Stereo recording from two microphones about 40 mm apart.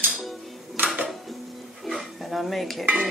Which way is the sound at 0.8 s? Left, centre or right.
Right.